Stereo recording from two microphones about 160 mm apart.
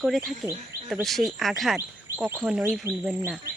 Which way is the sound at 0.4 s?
10° right (ahead or behind).